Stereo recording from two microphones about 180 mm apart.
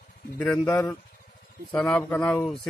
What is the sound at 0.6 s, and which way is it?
Speech, 10° left (ahead or behind).